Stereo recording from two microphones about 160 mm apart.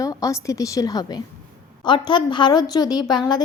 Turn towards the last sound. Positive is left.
turn(degrees=25)  # may be behind; listen again after turning